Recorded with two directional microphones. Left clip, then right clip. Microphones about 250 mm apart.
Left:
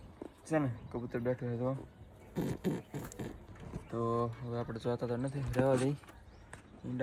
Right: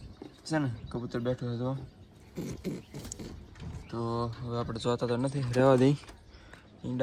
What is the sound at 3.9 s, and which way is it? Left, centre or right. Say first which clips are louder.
Speech: even; centre.